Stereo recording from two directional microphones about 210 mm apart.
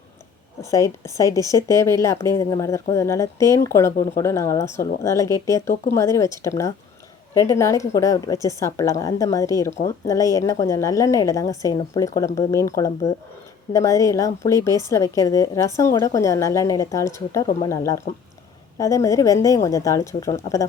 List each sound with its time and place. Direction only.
0.6 s a woman's voice: 15° left (ahead or behind)
7.3 s a woman's voice: 15° left (ahead or behind)